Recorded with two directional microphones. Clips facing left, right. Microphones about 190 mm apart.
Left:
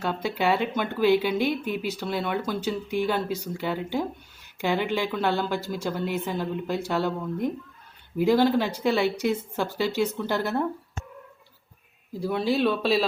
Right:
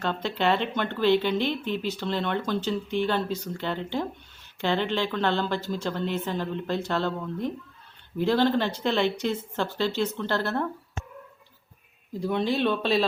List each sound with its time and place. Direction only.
0.0 s speech: 10° left (ahead or behind)
12.1 s speech: 5° left (ahead or behind)